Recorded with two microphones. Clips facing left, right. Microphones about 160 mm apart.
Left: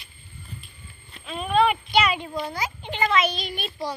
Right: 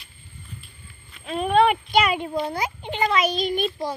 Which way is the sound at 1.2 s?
55° right (ahead or behind).